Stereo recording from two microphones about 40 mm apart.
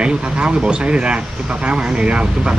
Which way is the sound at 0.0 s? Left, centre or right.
Right.